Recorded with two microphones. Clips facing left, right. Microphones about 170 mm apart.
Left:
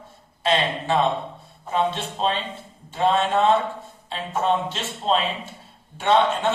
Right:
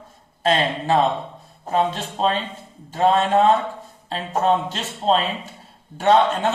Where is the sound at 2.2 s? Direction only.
45° right (ahead or behind).